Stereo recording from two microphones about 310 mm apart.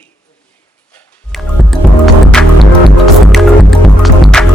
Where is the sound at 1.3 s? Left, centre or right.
Centre.